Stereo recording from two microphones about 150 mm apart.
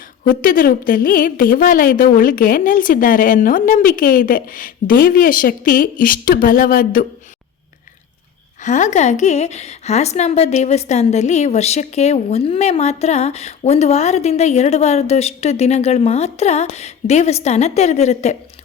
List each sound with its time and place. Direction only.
0.3 s a woman's voice: 70° left (ahead or behind)
8.6 s a woman's voice: 55° left (ahead or behind)